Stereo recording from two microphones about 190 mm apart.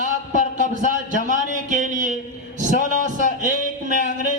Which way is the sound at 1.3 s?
40° right (ahead or behind).